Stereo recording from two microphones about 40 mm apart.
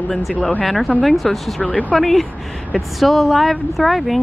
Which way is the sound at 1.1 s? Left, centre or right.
Centre.